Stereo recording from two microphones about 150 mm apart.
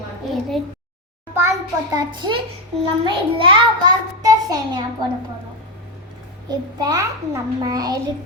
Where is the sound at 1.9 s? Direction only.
30° right (ahead or behind).